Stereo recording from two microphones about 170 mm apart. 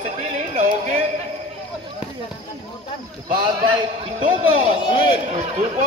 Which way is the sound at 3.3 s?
30° right (ahead or behind).